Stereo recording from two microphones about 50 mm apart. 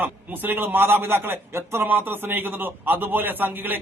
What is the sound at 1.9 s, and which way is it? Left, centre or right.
A man's voice, right.